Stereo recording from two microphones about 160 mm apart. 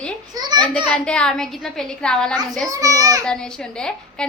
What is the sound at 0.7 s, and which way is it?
A woman's voice, 5° left (ahead or behind).